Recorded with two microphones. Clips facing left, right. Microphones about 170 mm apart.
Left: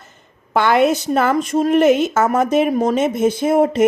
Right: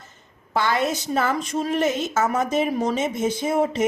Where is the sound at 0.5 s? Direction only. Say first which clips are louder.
Left 8 dB; 60° left (ahead or behind).